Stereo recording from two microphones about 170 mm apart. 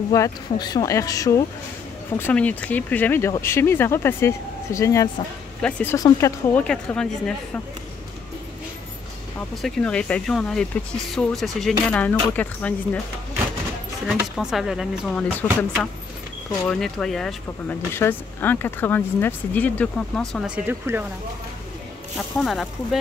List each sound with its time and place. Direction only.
0.1 s speech: 20° left (ahead or behind)
5.6 s speech: 10° left (ahead or behind)
5.9 s speech: 20° left (ahead or behind)
6.6 s speech: 5° left (ahead or behind)
9.6 s speech: 5° left (ahead or behind)
14.0 s speech: centre (ahead or behind)
16.6 s speech: 5° left (ahead or behind); by 21.0 s 10° right (ahead or behind)
22.4 s speech: centre (ahead or behind)